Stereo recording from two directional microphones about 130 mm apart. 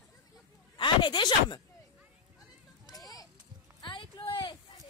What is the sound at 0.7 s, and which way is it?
Speech, 35° left (ahead or behind).